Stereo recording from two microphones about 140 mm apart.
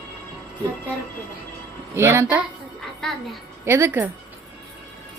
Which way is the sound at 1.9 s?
20° right (ahead or behind).